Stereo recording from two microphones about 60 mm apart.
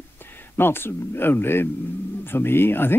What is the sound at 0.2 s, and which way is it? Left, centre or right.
Speech, left.